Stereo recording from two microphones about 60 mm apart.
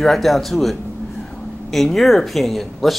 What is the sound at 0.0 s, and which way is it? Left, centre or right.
Speech, centre.